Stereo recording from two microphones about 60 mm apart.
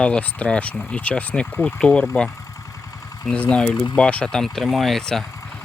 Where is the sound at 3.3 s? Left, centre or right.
Centre.